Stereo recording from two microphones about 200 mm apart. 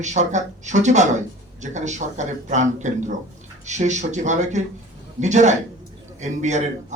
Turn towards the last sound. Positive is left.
turn(degrees=-35)  # may be behind; listen again after turning